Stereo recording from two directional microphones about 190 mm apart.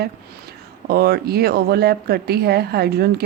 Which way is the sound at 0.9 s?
55° right (ahead or behind).